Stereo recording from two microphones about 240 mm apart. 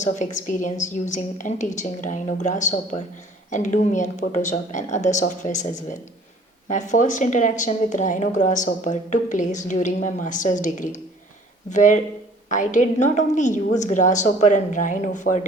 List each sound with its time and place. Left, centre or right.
0.0 s a woman's voice: left